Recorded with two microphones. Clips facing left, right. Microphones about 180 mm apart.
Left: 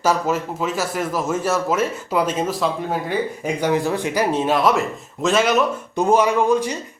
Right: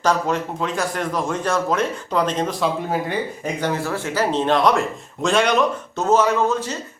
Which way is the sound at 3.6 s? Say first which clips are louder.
Left 4 dB; 15° left (ahead or behind).